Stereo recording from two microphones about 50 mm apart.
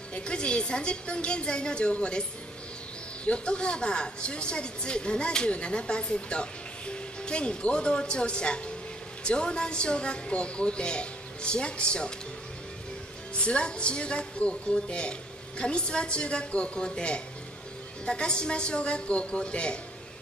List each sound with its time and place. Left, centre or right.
0.1 s a woman's voice: centre
3.3 s a woman's voice: centre
13.3 s a woman's voice: centre